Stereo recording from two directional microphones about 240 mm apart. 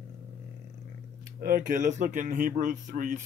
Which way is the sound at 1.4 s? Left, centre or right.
Right.